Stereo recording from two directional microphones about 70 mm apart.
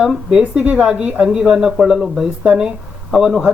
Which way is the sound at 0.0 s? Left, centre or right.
Centre.